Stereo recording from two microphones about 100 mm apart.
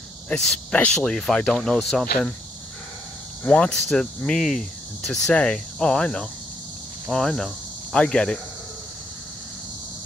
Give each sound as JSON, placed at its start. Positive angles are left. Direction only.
{"t": 0.3, "sound": "speech", "side_deg": 5}
{"t": 3.4, "sound": "speech", "side_deg": 10}
{"t": 7.1, "sound": "cricket", "side_deg": 5}